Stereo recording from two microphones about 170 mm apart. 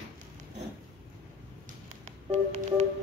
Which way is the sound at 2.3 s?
40° right (ahead or behind).